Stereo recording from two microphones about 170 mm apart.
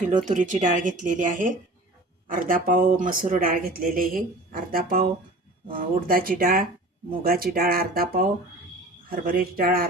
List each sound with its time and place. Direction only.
0.1 s speech: 45° right (ahead or behind)